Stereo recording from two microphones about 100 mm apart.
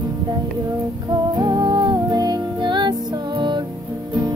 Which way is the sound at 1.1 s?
40° right (ahead or behind).